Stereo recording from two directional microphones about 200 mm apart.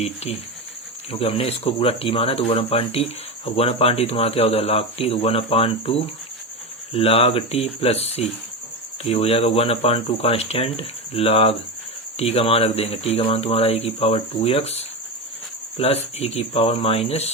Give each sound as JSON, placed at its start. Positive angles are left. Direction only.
{"t": 0.0, "sound": "speech", "side_deg": 30}
{"t": 6.9, "sound": "speech", "side_deg": 30}